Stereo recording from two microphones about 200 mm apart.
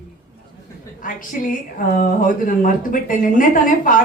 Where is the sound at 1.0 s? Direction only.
40° left (ahead or behind).